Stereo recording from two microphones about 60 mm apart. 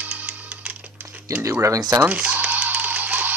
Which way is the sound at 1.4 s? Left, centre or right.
Right.